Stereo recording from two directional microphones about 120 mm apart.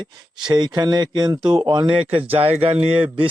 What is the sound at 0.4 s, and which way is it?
Speech, 40° right (ahead or behind).